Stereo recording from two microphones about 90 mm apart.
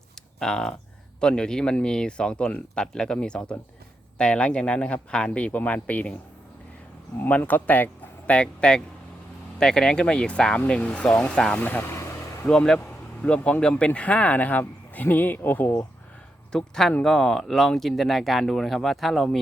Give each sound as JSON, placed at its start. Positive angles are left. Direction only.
{"t": 0.3, "sound": "speech", "side_deg": 5}
{"t": 7.2, "sound": "speech", "side_deg": 15}
{"t": 11.6, "sound": "vehicle", "side_deg": 20}
{"t": 12.5, "sound": "speech", "side_deg": 10}
{"t": 16.5, "sound": "speech", "side_deg": 5}